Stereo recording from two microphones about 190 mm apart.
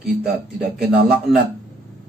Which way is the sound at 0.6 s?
55° right (ahead or behind).